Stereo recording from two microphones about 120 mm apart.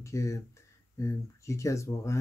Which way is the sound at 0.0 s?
25° left (ahead or behind).